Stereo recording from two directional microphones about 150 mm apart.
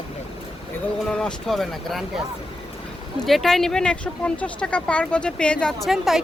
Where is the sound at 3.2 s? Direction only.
Centre (ahead or behind).